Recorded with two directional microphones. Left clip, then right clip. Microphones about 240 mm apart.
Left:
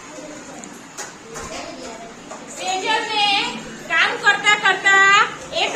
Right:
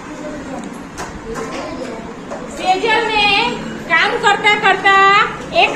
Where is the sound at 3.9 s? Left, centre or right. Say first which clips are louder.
Right 4 dB; centre.